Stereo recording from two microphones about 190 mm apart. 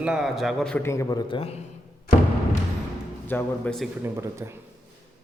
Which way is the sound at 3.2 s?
10° left (ahead or behind).